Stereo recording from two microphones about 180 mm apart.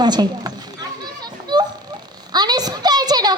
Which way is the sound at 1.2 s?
25° right (ahead or behind).